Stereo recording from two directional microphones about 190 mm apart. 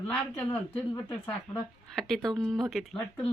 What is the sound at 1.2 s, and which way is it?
Speech, 5° left (ahead or behind).